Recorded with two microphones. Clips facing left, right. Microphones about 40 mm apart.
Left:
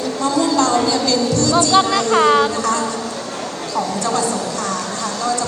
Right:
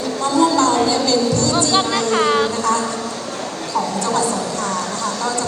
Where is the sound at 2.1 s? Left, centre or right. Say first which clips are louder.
Left 4 dB; left.